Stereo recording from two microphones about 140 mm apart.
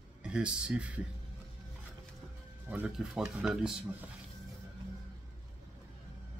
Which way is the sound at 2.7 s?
10° right (ahead or behind).